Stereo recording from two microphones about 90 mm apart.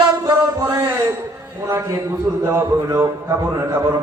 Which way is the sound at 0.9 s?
30° right (ahead or behind).